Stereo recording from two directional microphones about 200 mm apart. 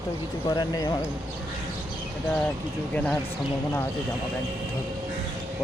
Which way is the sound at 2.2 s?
5° left (ahead or behind).